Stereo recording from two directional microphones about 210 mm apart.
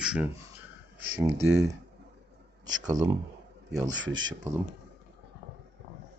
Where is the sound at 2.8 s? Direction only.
15° right (ahead or behind).